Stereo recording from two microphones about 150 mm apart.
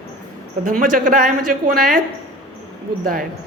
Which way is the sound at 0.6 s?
65° right (ahead or behind).